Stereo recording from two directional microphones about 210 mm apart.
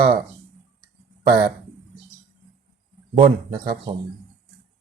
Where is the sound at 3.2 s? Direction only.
45° right (ahead or behind).